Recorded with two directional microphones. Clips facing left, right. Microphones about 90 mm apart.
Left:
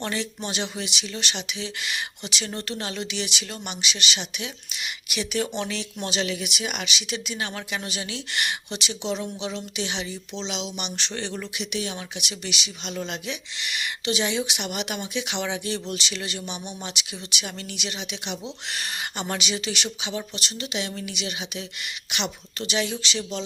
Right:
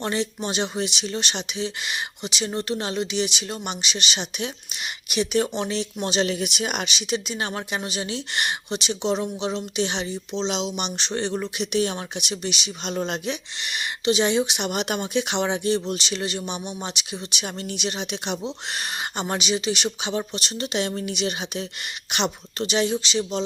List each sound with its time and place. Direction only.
0.0 s speech: 25° right (ahead or behind)
11.5 s speech: 40° right (ahead or behind)
18.4 s speech: 25° right (ahead or behind)
20.0 s speech: 35° right (ahead or behind)